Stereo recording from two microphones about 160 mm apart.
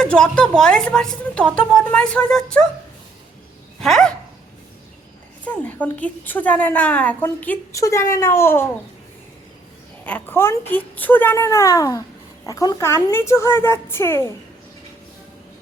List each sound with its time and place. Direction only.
0.0 s a woman's voice: 5° left (ahead or behind)
3.8 s dog: 5° left (ahead or behind)
5.5 s a woman's voice: 10° left (ahead or behind)
10.1 s a woman's voice: 10° left (ahead or behind)